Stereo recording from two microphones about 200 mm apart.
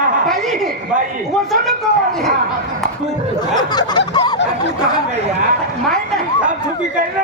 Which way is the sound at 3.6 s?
20° left (ahead or behind).